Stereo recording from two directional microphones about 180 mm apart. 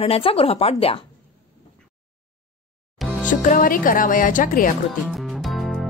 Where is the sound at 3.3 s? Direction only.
45° left (ahead or behind).